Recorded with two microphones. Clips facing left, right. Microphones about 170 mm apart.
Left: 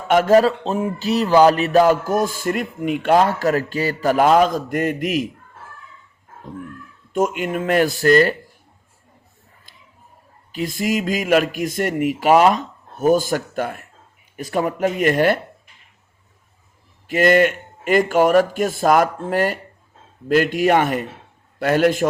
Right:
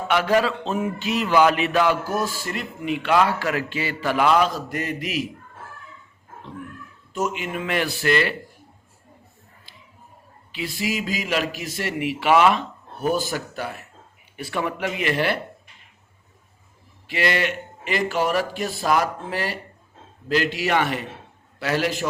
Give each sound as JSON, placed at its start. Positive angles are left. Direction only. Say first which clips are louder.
{"t": 0.1, "sound": "a man's voice", "louder": "left 7 dB", "side_deg": 45}
{"t": 7.1, "sound": "a man's voice", "louder": "left 6 dB", "side_deg": 50}
{"t": 9.7, "sound": "a sound", "louder": "right 3 dB", "side_deg": 50}
{"t": 10.5, "sound": "a man's voice", "louder": "left 6 dB", "side_deg": 45}
{"t": 17.1, "sound": "a man's voice", "louder": "left 9 dB", "side_deg": 45}